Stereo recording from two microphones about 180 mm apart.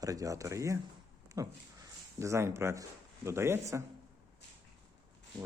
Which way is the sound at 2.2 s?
15° right (ahead or behind).